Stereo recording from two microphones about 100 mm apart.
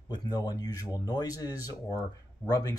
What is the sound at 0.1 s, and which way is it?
Speech, 40° left (ahead or behind).